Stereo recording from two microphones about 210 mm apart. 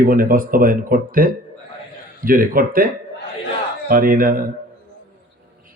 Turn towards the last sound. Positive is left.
turn(degrees=-40)  # may be behind; listen again after turning